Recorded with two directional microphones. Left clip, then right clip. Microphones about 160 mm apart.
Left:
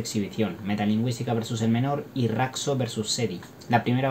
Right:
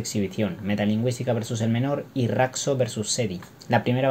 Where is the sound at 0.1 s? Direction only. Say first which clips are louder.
Right 2 dB; 40° right (ahead or behind).